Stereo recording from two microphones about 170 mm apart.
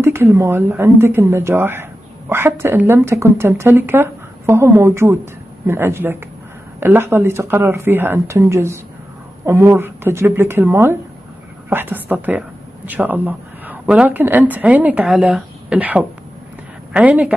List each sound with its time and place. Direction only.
0.0 s speech: 15° right (ahead or behind)